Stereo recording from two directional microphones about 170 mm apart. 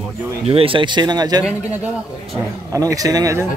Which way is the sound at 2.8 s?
20° right (ahead or behind).